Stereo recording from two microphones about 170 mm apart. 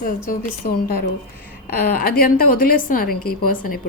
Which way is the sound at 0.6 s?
45° left (ahead or behind).